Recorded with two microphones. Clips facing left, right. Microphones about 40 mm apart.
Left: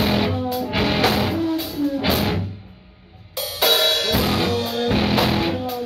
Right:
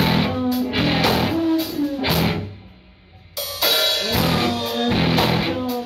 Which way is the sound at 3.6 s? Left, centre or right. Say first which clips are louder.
Left 2 dB; left.